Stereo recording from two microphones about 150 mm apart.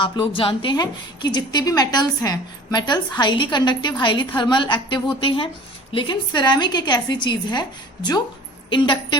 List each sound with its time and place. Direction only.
0.0 s a woman's voice: 35° left (ahead or behind)
8.7 s a woman's voice: 35° left (ahead or behind)